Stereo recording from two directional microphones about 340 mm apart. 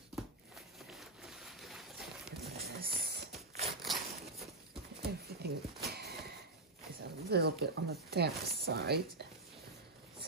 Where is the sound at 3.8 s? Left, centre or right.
Centre.